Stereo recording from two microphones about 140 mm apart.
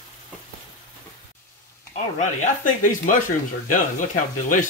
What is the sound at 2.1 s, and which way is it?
Speech, 65° left (ahead or behind).